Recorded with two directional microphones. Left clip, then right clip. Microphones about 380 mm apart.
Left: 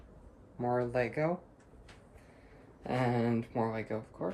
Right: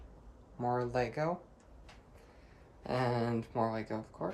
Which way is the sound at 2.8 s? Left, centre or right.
Centre.